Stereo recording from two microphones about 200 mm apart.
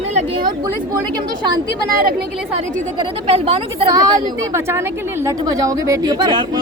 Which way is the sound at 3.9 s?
20° right (ahead or behind).